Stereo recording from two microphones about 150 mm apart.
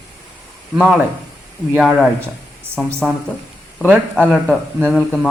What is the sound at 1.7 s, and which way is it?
Speech, 5° right (ahead or behind).